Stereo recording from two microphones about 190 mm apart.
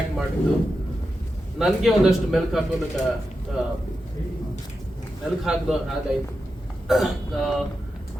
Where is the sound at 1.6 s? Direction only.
Centre (ahead or behind).